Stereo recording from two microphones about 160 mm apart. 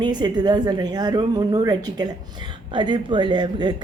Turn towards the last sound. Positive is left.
turn(degrees=-30)  # may be behind; listen again after turning